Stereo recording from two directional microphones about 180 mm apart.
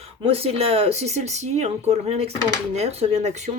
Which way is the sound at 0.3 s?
35° right (ahead or behind).